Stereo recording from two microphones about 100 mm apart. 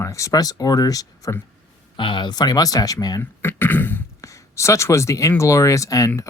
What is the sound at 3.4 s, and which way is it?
Speech, 20° left (ahead or behind).